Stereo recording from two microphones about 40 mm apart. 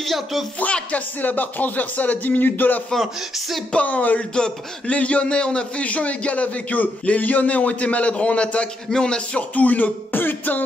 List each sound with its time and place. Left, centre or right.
0.0 s speech: centre
0.9 s speech: left
2.9 s speech: centre
3.8 s speech: left
4.4 s a man's voice: left
9.6 s speech: left
10.1 s music: left